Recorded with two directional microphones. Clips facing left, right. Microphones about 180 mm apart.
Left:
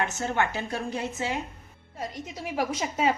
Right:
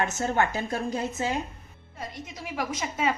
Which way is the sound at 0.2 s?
40° right (ahead or behind).